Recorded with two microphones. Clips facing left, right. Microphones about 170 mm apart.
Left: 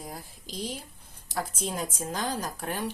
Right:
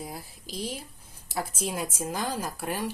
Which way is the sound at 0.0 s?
5° right (ahead or behind).